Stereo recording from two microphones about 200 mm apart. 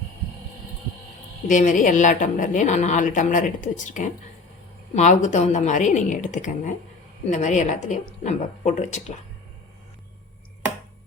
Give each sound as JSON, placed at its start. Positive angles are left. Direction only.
{"t": 1.5, "sound": "a woman's voice", "side_deg": 40}